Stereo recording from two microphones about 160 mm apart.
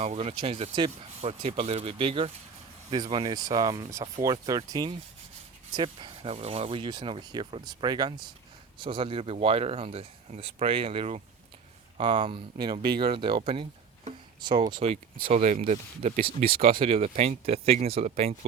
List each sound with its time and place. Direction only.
0.0 s speech: 40° right (ahead or behind)
15.2 s speech: 50° right (ahead or behind)